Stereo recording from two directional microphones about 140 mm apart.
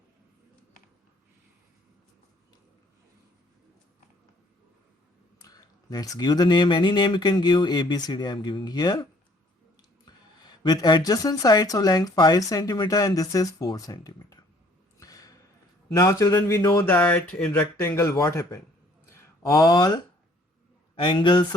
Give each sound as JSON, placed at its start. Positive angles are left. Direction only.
{"t": 5.4, "sound": "speech", "side_deg": 25}
{"t": 10.1, "sound": "speech", "side_deg": 30}
{"t": 14.9, "sound": "a sound", "side_deg": 25}
{"t": 16.0, "sound": "speech", "side_deg": 20}